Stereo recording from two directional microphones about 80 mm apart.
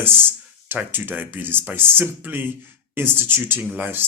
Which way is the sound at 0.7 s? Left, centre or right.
Right.